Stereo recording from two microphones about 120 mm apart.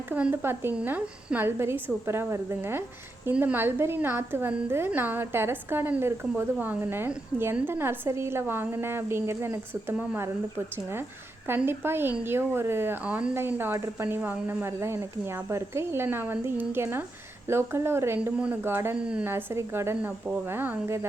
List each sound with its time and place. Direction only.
0.1 s a woman's voice: 15° right (ahead or behind)
11.4 s a woman's voice: 20° right (ahead or behind)
18.9 s a woman's voice: 10° right (ahead or behind)
19.3 s a woman's voice: 20° right (ahead or behind)